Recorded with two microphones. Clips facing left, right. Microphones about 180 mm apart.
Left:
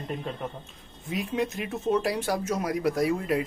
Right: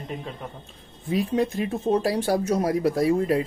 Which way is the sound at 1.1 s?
35° right (ahead or behind).